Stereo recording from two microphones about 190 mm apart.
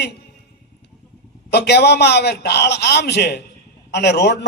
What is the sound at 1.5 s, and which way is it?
A man's voice, 60° left (ahead or behind).